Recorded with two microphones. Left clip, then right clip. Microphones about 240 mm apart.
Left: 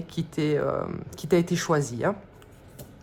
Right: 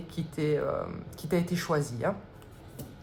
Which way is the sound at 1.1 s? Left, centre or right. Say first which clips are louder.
Left 9 dB; left.